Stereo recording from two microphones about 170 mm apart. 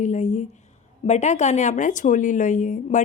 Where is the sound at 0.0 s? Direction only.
45° left (ahead or behind).